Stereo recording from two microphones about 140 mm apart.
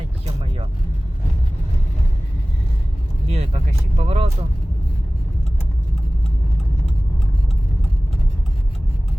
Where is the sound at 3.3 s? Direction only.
45° right (ahead or behind).